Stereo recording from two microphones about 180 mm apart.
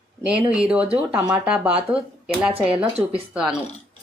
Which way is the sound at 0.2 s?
5° right (ahead or behind).